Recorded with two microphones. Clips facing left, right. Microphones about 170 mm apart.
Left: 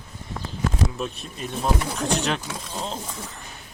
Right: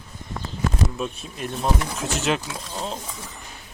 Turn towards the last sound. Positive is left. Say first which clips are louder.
# left 1 dB
turn(degrees=0)  # may be behind; listen again after turning